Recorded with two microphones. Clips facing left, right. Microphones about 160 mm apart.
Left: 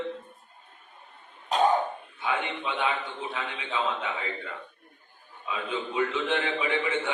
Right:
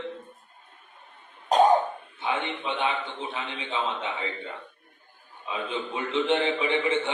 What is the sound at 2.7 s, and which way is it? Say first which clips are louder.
A man's voice: even; 25° right (ahead or behind).